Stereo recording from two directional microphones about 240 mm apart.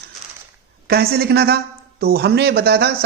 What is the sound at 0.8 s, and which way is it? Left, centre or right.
Speech, right.